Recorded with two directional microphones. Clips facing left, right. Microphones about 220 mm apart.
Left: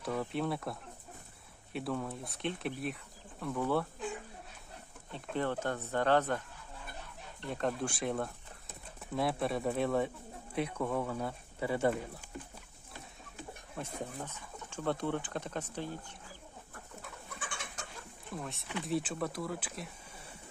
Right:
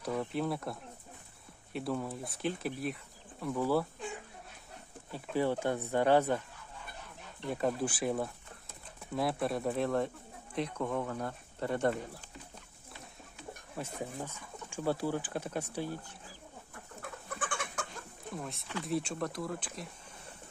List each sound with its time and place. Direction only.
0.0 s speech: centre (ahead or behind)
5.1 s speech: 10° right (ahead or behind)
7.4 s speech: 5° right (ahead or behind)
13.7 s speech: 10° right (ahead or behind)
17.0 s chicken: 55° right (ahead or behind)
18.3 s speech: centre (ahead or behind)